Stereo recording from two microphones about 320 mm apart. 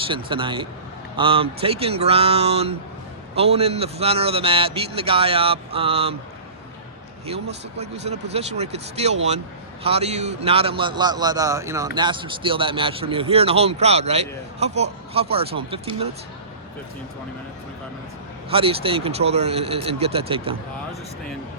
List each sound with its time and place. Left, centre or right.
0.1 s a man's voice: centre
7.8 s a man's voice: centre
18.5 s a man's voice: centre